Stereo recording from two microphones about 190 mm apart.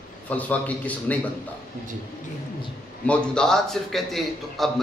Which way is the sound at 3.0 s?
5° left (ahead or behind).